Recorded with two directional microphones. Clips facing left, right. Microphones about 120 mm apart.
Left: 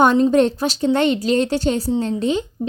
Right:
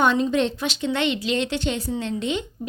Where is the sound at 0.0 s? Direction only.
45° left (ahead or behind).